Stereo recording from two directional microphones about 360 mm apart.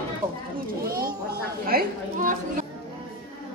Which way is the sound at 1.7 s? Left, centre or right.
Right.